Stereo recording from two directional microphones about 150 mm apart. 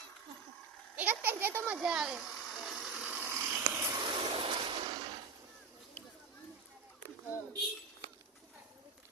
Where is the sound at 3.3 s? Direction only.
15° right (ahead or behind).